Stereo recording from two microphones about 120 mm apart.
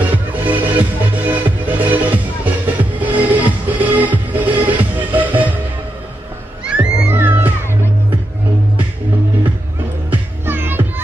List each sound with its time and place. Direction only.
0.0 s music: 15° right (ahead or behind)
6.6 s music: 10° right (ahead or behind)
7.1 s music: 20° right (ahead or behind)
10.4 s music: 15° right (ahead or behind)